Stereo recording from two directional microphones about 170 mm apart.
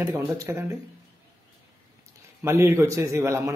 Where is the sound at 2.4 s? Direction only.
15° right (ahead or behind).